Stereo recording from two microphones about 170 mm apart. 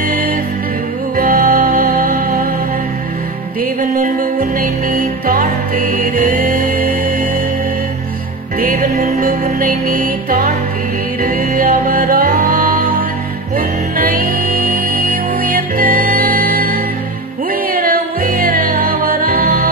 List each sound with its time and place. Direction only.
1.1 s music: 55° right (ahead or behind)
3.8 s music: 55° right (ahead or behind)
8.5 s music: 55° right (ahead or behind)